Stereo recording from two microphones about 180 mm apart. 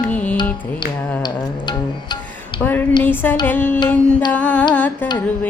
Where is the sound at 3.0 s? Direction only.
10° left (ahead or behind).